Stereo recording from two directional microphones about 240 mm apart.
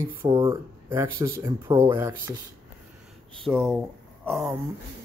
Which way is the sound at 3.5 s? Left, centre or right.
Centre.